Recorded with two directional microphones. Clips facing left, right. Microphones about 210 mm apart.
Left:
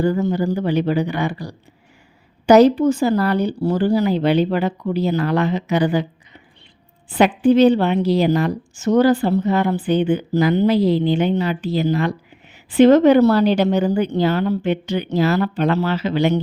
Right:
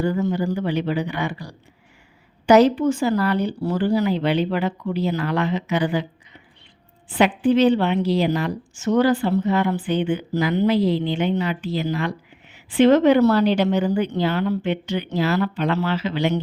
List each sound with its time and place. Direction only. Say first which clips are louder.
0.0 s a woman's voice: left 3 dB; 40° left (ahead or behind)
7.1 s a woman's voice: left 3 dB; 40° left (ahead or behind)